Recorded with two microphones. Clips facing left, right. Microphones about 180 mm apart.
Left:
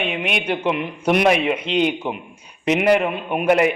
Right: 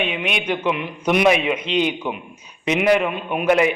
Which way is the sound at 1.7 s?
55° left (ahead or behind).